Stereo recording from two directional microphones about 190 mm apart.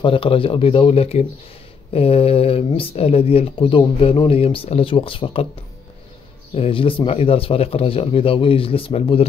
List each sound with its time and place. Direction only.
0.0 s speech: 30° left (ahead or behind)
6.5 s speech: 30° left (ahead or behind)